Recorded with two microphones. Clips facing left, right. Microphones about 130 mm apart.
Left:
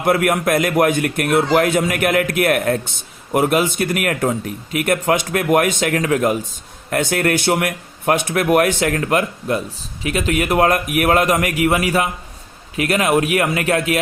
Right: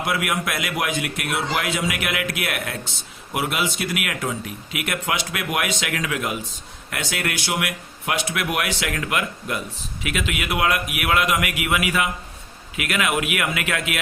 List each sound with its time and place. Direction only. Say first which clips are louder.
0.0 s a man's voice: left 8 dB; 50° left (ahead or behind)